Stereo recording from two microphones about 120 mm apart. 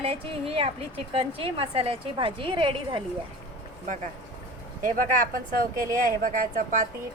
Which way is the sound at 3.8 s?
90° right.